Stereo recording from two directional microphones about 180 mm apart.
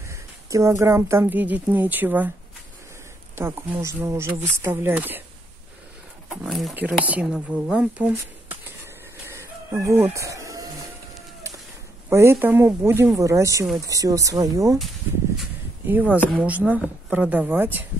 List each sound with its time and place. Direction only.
0.0 s a woman's voice: 15° right (ahead or behind)
3.3 s speech: 15° right (ahead or behind)
6.2 s speech: centre (ahead or behind)
9.3 s chicken: 15° right (ahead or behind)
12.1 s speech: 15° right (ahead or behind)
15.9 s speech: 10° right (ahead or behind)
16.2 s speech: 5° left (ahead or behind)
16.4 s speech: 10° right (ahead or behind)